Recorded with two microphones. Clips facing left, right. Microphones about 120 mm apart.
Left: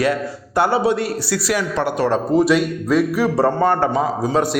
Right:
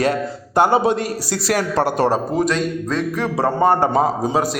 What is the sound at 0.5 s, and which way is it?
Speech, 20° right (ahead or behind).